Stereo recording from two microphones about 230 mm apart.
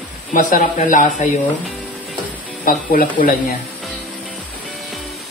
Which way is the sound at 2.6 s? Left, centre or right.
Left.